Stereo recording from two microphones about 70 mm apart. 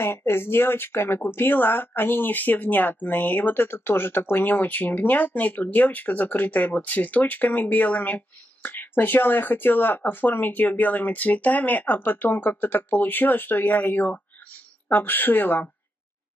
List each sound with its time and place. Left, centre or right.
0.0 s speech: left